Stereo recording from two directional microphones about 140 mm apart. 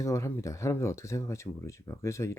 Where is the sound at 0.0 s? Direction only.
20° left (ahead or behind).